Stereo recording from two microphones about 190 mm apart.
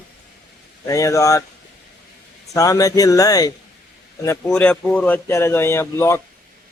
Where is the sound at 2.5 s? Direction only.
15° left (ahead or behind).